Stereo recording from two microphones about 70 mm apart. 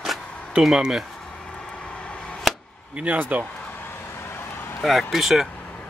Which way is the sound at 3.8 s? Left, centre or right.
Left.